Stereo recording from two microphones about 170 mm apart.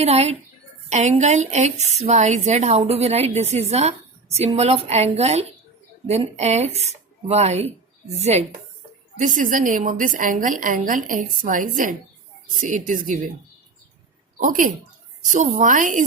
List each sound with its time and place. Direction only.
0.0 s a woman's voice: 40° right (ahead or behind)
14.3 s a woman's voice: 50° right (ahead or behind)